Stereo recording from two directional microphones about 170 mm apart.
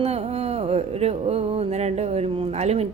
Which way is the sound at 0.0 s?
35° right (ahead or behind).